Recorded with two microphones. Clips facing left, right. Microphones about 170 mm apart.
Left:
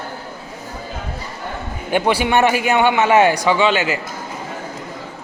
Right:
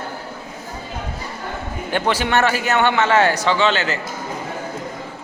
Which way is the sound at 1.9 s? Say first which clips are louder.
Left 3 dB; 15° left (ahead or behind).